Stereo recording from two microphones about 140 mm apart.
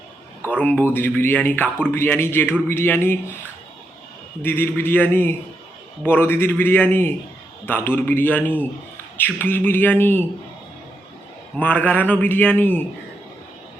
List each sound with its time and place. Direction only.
0.5 s speech: 10° left (ahead or behind)
4.4 s speech: 15° left (ahead or behind)
11.5 s speech: 10° left (ahead or behind)